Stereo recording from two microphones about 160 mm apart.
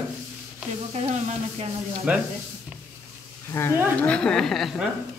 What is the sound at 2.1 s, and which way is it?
Speech, 10° right (ahead or behind).